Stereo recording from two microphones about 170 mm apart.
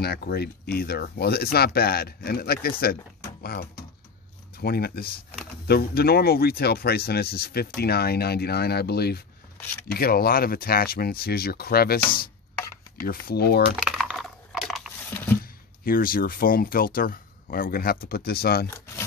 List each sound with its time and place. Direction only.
0.0 s speech: 70° left (ahead or behind)
9.6 s speech: 10° left (ahead or behind)
9.9 s speech: 65° left (ahead or behind)
13.3 s speech: 70° left (ahead or behind)
13.7 s a sound: 5° right (ahead or behind)
15.8 s speech: 60° left (ahead or behind)